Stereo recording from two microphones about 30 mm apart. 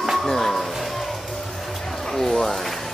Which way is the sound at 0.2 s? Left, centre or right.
Centre.